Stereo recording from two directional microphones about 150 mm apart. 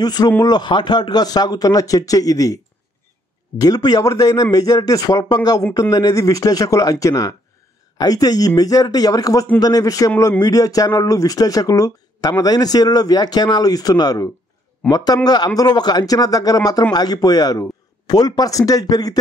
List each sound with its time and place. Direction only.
0.0 s speech: 25° left (ahead or behind)